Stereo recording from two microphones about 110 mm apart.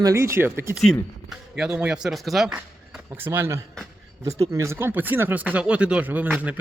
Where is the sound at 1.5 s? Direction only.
10° right (ahead or behind).